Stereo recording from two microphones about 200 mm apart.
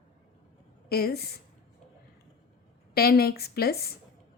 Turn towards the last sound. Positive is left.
turn(degrees=50)  # may be behind; listen again after turning